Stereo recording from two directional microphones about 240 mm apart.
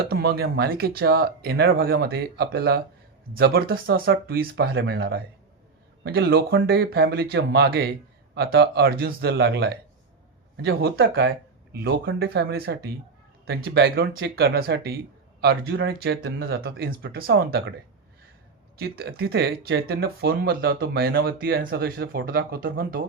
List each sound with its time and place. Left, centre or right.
0.0 s speech: right
18.8 s speech: right